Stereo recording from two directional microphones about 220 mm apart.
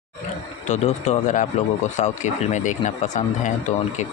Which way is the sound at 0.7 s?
30° left (ahead or behind).